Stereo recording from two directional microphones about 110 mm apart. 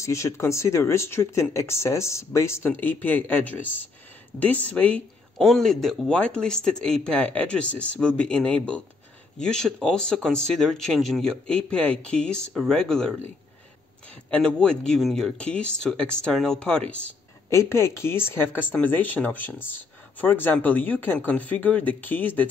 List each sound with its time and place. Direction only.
0.0 s speech: 25° left (ahead or behind)
5.4 s speech: centre (ahead or behind)
14.3 s speech: 10° left (ahead or behind)
17.5 s speech: 25° left (ahead or behind)